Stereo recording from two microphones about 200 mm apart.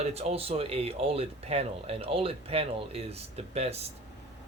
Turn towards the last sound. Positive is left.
turn(degrees=-30)  # may be behind; listen again after turning